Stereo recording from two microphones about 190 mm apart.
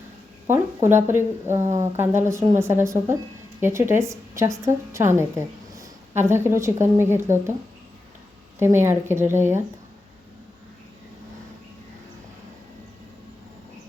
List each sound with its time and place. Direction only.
0.4 s a woman's voice: 15° right (ahead or behind)
1.5 s speech: 40° right (ahead or behind)
1.8 s a woman's voice: 15° right (ahead or behind)
8.5 s a woman's voice: 15° right (ahead or behind)